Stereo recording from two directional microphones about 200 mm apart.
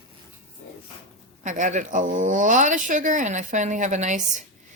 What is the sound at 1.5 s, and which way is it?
Speech, 40° right (ahead or behind).